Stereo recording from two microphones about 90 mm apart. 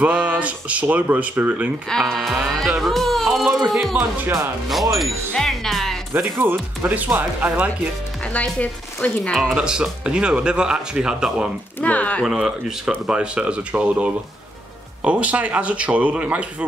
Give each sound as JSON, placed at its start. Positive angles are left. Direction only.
{"t": 0.0, "sound": "speech", "side_deg": -15}
{"t": 1.9, "sound": "speech", "side_deg": 5}
{"t": 4.9, "sound": "music", "side_deg": 0}
{"t": 6.1, "sound": "speech", "side_deg": -25}
{"t": 8.3, "sound": "speech", "side_deg": 15}
{"t": 9.3, "sound": "speech", "side_deg": 0}
{"t": 11.8, "sound": "speech", "side_deg": 15}
{"t": 12.3, "sound": "speech", "side_deg": -5}